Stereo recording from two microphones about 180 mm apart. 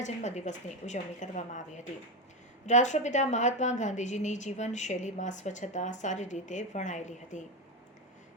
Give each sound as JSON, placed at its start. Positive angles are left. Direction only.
{"t": 0.0, "sound": "a woman's voice", "side_deg": 40}